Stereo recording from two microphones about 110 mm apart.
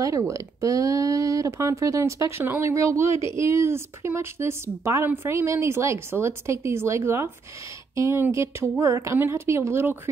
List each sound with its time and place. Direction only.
0.0 s speech: 30° right (ahead or behind)